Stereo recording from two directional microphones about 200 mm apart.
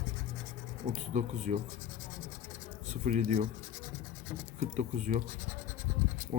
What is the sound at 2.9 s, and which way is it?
Speech, 40° right (ahead or behind).